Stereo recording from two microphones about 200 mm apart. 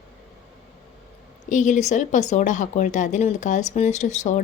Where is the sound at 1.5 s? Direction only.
40° left (ahead or behind).